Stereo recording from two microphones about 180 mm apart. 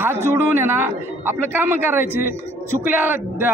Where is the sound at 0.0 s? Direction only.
10° right (ahead or behind).